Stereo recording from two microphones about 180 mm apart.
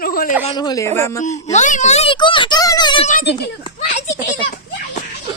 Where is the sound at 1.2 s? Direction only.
40° left (ahead or behind).